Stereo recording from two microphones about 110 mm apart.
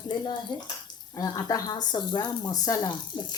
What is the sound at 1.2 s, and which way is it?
Speech, 30° left (ahead or behind).